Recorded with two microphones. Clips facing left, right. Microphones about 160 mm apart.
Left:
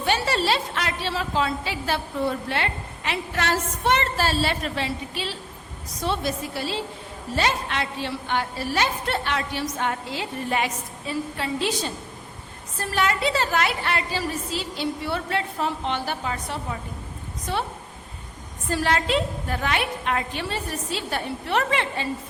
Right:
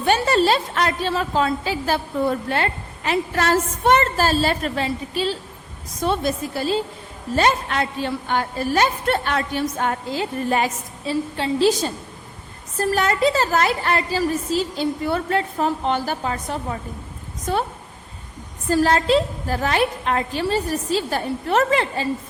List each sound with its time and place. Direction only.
0.0 s a woman's voice: 45° right (ahead or behind); by 11.7 s 30° right (ahead or behind)
12.7 s a woman's voice: 40° right (ahead or behind)
18.7 s a woman's voice: 40° right (ahead or behind)